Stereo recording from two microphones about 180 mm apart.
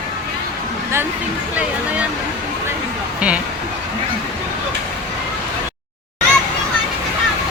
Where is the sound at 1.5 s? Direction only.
10° right (ahead or behind).